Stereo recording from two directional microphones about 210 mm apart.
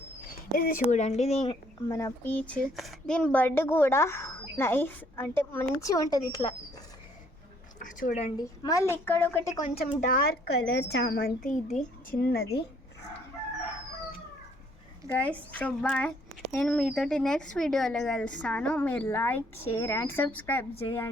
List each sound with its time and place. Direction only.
0.5 s speech: 40° left (ahead or behind)
1.9 s speech: 15° left (ahead or behind)
7.8 s speech: 40° left (ahead or behind)
8.4 s speech: 15° left (ahead or behind)
9.7 s speech: 40° left (ahead or behind)
11.4 s speech: 35° left (ahead or behind)
12.2 s speech: 50° left (ahead or behind)
15.1 s speech: 5° left (ahead or behind)